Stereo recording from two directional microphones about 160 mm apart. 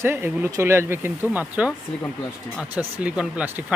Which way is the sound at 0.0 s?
15° right (ahead or behind).